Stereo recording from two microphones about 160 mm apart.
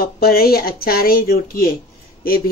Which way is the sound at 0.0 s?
70° left (ahead or behind).